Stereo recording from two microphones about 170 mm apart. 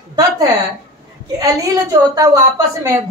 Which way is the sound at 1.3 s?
20° right (ahead or behind).